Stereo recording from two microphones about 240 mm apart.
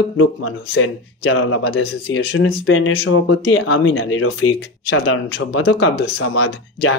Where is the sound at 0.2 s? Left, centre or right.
Left.